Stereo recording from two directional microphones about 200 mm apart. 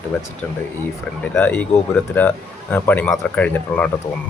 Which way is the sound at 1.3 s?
10° left (ahead or behind).